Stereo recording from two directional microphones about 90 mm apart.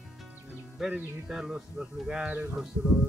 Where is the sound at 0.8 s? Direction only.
5° right (ahead or behind).